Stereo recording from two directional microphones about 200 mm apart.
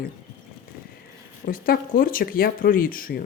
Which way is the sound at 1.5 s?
45° left (ahead or behind).